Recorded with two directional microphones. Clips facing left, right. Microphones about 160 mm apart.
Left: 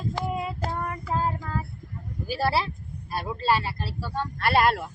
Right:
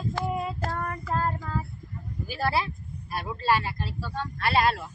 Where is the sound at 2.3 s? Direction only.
30° left (ahead or behind).